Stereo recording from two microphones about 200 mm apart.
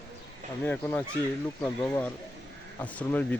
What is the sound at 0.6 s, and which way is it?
Speech, 10° left (ahead or behind).